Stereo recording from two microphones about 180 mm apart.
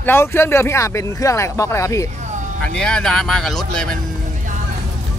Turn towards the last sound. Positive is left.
turn(degrees=5)  # may be behind; listen again after turning